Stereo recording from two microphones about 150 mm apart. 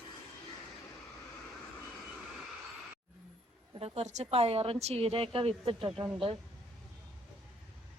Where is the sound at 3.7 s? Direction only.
45° right (ahead or behind).